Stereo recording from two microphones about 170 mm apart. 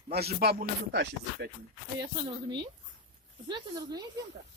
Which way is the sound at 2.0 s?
25° right (ahead or behind).